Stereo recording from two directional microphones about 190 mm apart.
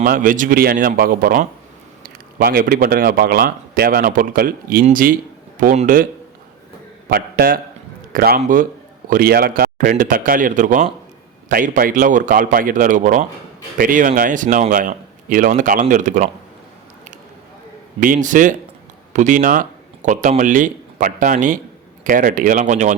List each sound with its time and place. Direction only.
0.0 s a man's voice: 45° right (ahead or behind)
7.1 s a man's voice: 50° right (ahead or behind)
18.0 s a man's voice: 45° right (ahead or behind)